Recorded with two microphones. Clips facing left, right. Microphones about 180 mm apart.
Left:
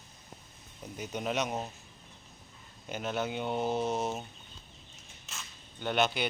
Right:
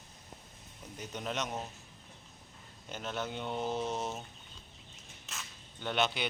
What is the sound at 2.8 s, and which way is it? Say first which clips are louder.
Speech: left 5 dB; 10° left (ahead or behind).